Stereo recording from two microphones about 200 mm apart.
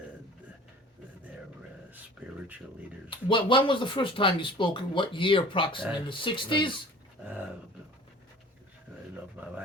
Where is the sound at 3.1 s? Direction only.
25° left (ahead or behind).